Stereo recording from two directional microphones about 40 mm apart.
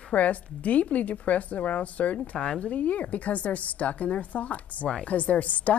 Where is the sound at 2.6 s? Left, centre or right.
Left.